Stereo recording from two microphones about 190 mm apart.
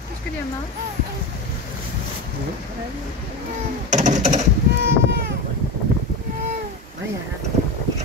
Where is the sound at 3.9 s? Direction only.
40° right (ahead or behind).